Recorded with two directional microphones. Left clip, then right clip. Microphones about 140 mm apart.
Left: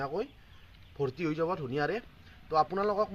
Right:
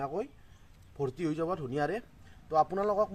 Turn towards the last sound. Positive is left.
turn(degrees=-40)  # may be behind; listen again after turning